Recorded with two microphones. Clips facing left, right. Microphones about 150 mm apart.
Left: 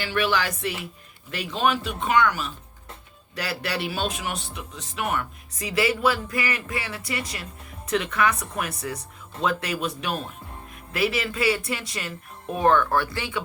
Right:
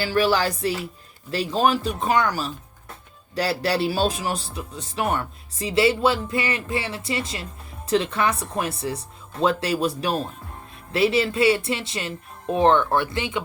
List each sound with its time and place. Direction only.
0.0 s speech: 35° right (ahead or behind)